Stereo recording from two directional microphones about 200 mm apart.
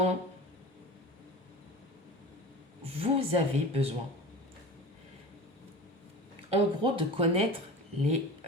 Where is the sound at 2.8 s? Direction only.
30° right (ahead or behind).